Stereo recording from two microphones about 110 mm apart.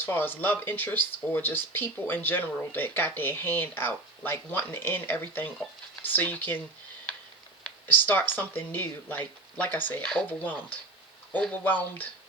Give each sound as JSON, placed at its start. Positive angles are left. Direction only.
{"t": 0.0, "sound": "speech", "side_deg": 20}
{"t": 7.6, "sound": "speech", "side_deg": 15}